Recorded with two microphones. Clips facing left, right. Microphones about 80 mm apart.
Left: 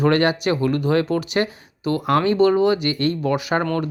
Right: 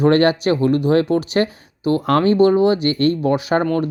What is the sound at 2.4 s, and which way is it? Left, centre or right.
Speech, right.